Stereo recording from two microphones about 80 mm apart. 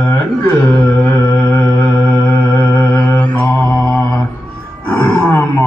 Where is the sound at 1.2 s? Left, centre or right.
Left.